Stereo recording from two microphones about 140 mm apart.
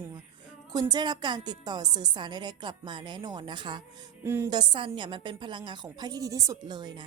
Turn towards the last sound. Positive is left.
turn(degrees=-30)  # may be behind; listen again after turning